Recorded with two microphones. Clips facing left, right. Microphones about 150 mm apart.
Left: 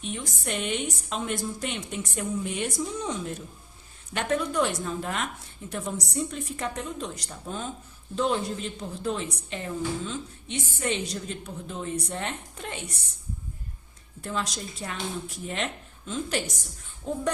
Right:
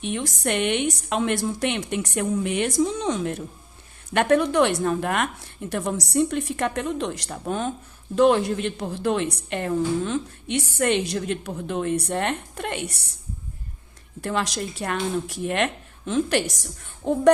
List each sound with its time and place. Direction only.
0.0 s a woman's voice: 70° right (ahead or behind)
14.2 s a woman's voice: 70° right (ahead or behind)